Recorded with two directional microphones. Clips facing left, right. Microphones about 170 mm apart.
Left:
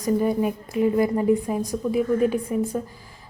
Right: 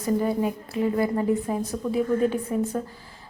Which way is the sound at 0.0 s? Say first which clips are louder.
Left 2 dB; 15° left (ahead or behind).